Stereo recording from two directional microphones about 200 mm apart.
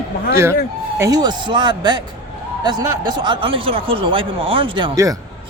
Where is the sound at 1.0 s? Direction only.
20° right (ahead or behind).